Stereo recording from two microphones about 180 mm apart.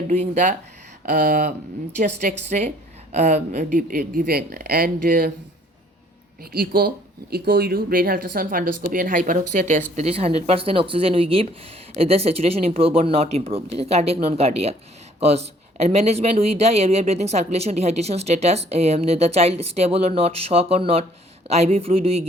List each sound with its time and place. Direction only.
0.1 s speech: 40° right (ahead or behind)
2.0 s speech: 40° right (ahead or behind)
6.4 s speech: 55° right (ahead or behind); by 22.3 s 35° right (ahead or behind)